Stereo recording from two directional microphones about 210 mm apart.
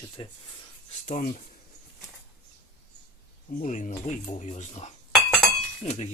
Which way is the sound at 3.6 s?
35° left (ahead or behind).